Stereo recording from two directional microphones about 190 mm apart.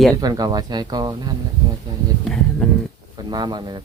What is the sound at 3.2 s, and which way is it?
Speech, 20° right (ahead or behind).